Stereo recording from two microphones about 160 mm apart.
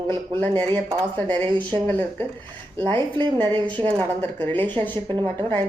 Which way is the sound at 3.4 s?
30° right (ahead or behind).